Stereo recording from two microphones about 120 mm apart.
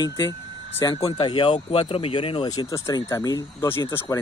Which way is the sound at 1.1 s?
40° left (ahead or behind).